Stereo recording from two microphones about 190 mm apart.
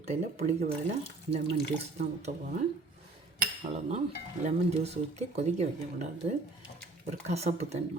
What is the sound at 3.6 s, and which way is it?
Cutlery, 35° right (ahead or behind).